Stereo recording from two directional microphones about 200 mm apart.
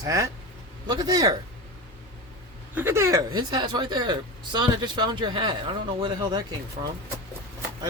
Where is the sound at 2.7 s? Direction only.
10° right (ahead or behind).